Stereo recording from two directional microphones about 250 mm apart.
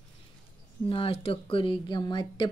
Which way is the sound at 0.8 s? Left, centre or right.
Left.